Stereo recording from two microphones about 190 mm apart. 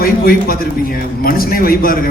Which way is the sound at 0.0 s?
50° left (ahead or behind).